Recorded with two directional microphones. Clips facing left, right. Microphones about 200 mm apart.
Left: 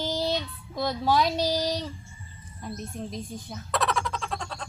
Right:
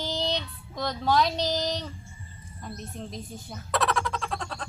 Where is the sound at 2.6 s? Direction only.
5° left (ahead or behind).